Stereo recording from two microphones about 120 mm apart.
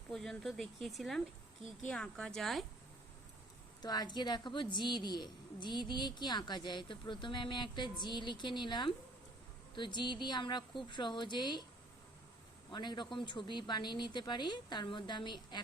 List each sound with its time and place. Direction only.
0.1 s speech: 5° left (ahead or behind)
3.8 s a woman's voice: 35° left (ahead or behind)
12.7 s a woman's voice: 40° left (ahead or behind)